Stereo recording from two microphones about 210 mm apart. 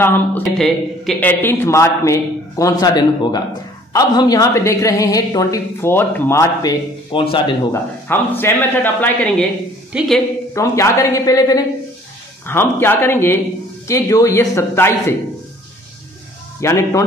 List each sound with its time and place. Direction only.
0.0 s a woman's voice: 10° left (ahead or behind); by 7.5 s 25° left (ahead or behind)
8.1 s a woman's voice: 10° left (ahead or behind)
10.5 s a woman's voice: 15° left (ahead or behind)
16.6 s a woman's voice: 15° left (ahead or behind)